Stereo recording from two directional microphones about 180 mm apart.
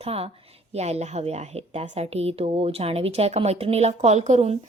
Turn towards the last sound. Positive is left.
turn(degrees=-35)  # may be behind; listen again after turning